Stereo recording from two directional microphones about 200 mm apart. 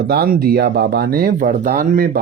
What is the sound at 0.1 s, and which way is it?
Speech, 50° right (ahead or behind).